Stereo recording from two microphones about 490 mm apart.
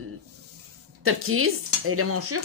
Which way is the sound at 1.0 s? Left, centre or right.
Right.